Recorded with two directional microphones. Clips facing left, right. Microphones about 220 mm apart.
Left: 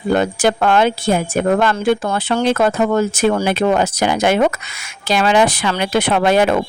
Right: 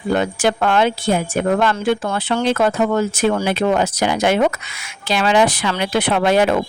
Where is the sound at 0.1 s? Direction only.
45° left (ahead or behind).